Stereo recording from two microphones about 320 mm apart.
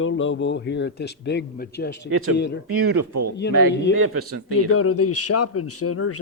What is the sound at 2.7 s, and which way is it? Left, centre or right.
Speech, right.